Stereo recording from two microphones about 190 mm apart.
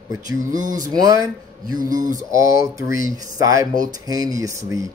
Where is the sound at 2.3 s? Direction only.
15° right (ahead or behind).